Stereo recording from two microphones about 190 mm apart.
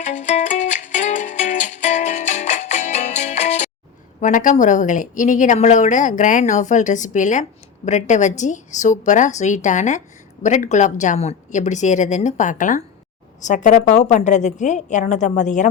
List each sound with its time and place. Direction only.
0.0 s music: 40° left (ahead or behind)
4.2 s speech: 45° left (ahead or behind)